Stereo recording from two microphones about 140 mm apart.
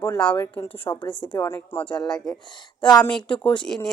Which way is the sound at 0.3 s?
15° left (ahead or behind).